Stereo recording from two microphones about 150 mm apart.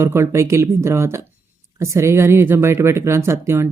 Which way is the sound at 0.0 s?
20° right (ahead or behind).